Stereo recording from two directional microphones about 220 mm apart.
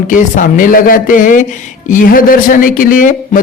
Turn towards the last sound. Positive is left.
turn(degrees=40)  # may be behind; listen again after turning